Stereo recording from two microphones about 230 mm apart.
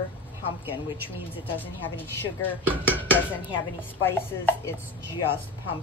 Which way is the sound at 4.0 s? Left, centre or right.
Centre.